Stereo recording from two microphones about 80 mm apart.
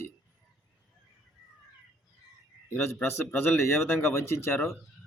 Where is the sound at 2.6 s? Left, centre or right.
Left.